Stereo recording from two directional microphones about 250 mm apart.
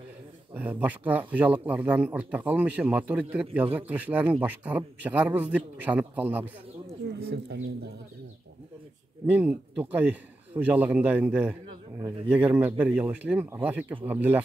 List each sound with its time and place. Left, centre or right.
0.6 s speech: centre
7.2 s speech: right
9.2 s speech: centre
11.6 s a sound: right
12.3 s speech: centre